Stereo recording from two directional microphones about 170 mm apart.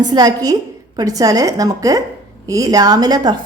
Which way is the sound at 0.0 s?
25° right (ahead or behind).